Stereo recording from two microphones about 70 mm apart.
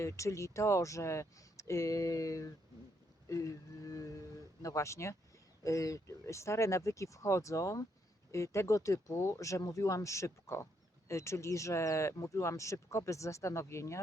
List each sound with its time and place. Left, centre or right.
0.0 s speech: left